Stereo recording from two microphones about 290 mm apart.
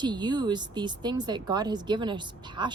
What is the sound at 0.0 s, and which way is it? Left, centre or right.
Speech, centre.